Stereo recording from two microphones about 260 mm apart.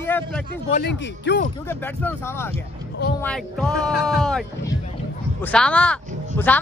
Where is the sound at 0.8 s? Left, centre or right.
Left.